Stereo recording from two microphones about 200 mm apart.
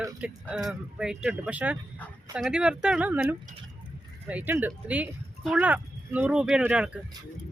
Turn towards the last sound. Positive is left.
turn(degrees=-5)  # may be behind; listen again after turning